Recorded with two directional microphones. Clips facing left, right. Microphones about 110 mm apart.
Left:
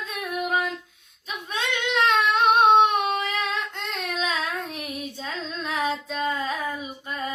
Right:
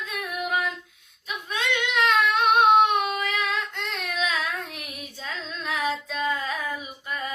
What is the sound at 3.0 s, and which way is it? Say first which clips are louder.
Child singing: left 1 dB; 35° left (ahead or behind).